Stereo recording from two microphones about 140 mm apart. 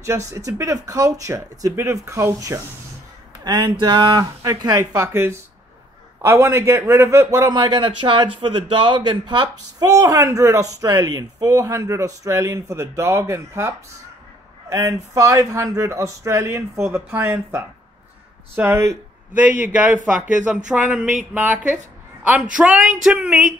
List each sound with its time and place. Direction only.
0.3 s a man's voice: 25° right (ahead or behind)
3.4 s a man's voice: 30° right (ahead or behind); by 21.7 s 10° right (ahead or behind)
22.6 s a sound: 5° right (ahead or behind)